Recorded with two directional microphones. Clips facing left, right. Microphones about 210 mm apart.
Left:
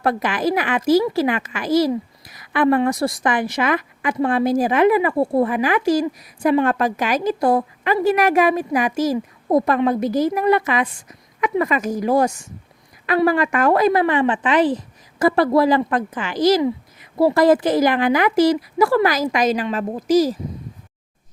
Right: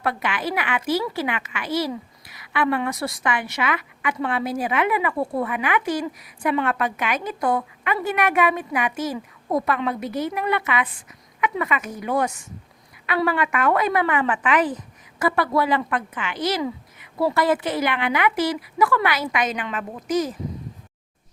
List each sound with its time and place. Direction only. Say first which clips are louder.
0.0 s a woman's voice: left 6 dB; 40° left (ahead or behind)
16.6 s a sound: left 7 dB; 35° left (ahead or behind)
17.3 s a woman's voice: left 8 dB; 40° left (ahead or behind)